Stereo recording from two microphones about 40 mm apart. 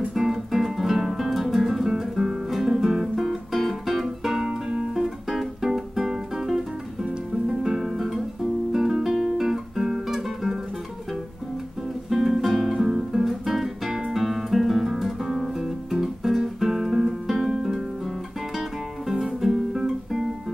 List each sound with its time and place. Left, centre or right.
0.1 s guitar: centre
3.3 s music: centre
4.5 s music: right
4.9 s music: centre
8.7 s guitar: centre
12.1 s guitar: centre
19.0 s music: centre